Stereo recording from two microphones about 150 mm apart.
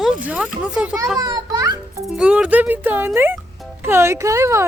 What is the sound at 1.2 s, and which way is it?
Music, 25° right (ahead or behind).